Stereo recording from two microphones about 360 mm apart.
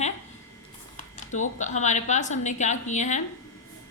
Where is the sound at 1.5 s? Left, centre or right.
Centre.